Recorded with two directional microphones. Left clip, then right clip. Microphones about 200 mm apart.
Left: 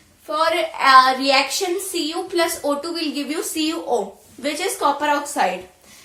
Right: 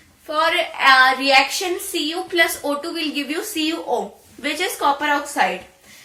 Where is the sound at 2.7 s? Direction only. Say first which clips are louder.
Left 1 dB; 20° left (ahead or behind).